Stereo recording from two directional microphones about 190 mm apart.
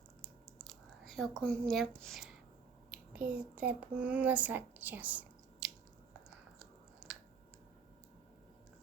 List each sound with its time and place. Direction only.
1.0 s a woman's voice: centre (ahead or behind)